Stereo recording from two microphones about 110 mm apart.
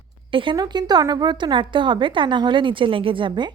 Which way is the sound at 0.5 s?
40° right (ahead or behind).